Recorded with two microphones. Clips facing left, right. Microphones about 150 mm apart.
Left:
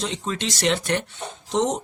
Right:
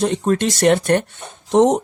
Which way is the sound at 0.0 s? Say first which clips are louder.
Right 10 dB; 55° right (ahead or behind).